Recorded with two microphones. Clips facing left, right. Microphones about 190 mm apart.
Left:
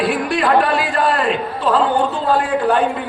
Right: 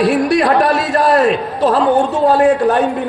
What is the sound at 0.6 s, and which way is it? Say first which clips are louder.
A man's voice: right 3 dB; 75° right (ahead or behind).